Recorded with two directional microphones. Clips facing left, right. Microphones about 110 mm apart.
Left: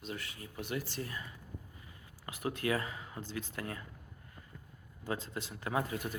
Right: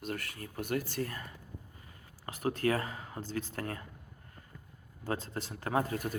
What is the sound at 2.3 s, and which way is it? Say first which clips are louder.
Speech: right 3 dB; 35° right (ahead or behind).